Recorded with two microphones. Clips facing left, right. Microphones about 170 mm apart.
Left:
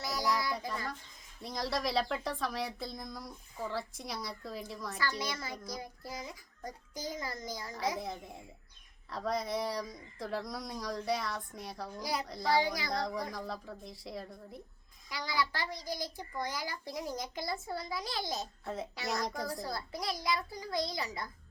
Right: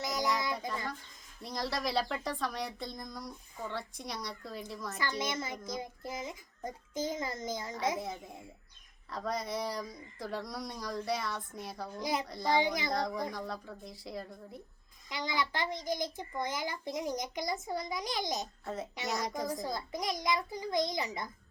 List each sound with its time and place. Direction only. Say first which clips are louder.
0.0 s child singing: right 1 dB; 20° right (ahead or behind)
1.4 s speech: left 1 dB; centre (ahead or behind)
4.9 s a child's voice: right 2 dB; 20° right (ahead or behind)
7.9 s speech: right 1 dB; centre (ahead or behind)
11.9 s a child's voice: right 3 dB; 20° right (ahead or behind)
12.2 s speech: even; centre (ahead or behind)
12.5 s a child's voice: right 2 dB; 20° right (ahead or behind)
12.9 s speech: right 2 dB; centre (ahead or behind)
15.1 s a child's voice: right 1 dB; 20° right (ahead or behind)
18.6 s speech: even; centre (ahead or behind)
19.6 s a child's voice: right 2 dB; 20° right (ahead or behind)